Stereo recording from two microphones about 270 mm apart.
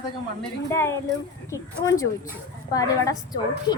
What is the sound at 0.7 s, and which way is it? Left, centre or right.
A woman's voice, centre.